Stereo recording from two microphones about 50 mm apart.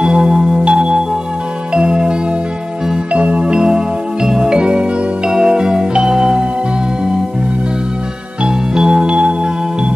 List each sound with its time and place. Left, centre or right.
0.0 s music: centre
8.5 s music: centre